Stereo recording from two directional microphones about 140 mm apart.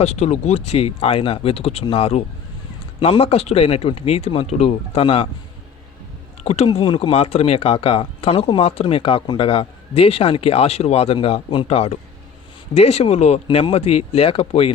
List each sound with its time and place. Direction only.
0.0 s speech: 50° left (ahead or behind)
6.4 s speech: 50° left (ahead or behind)